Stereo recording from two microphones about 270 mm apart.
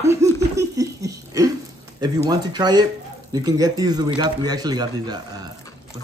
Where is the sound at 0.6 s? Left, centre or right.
Centre.